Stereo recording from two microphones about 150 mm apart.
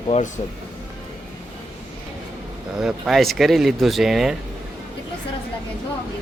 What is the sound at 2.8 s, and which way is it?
Speech, 5° right (ahead or behind).